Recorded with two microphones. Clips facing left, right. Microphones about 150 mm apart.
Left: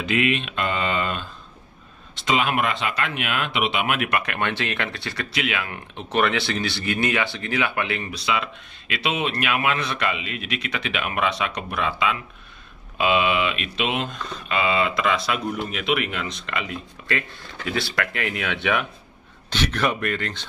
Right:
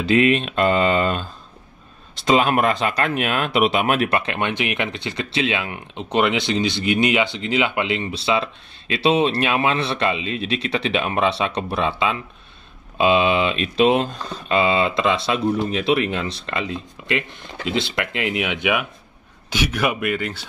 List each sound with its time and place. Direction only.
0.0 s speech: 35° right (ahead or behind); by 20.4 s 10° right (ahead or behind)